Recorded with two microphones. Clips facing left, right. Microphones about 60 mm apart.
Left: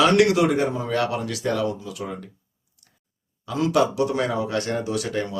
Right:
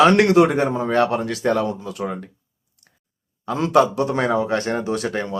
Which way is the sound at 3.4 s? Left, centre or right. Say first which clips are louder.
Right 4 dB; right.